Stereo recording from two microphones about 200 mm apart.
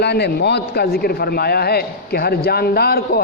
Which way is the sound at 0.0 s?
55° left (ahead or behind).